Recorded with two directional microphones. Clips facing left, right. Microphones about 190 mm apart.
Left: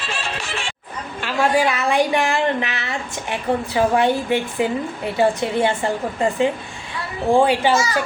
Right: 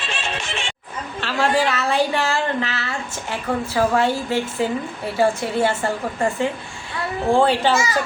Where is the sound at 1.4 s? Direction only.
10° left (ahead or behind).